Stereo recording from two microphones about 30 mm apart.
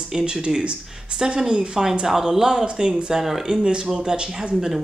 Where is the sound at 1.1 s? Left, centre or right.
Right.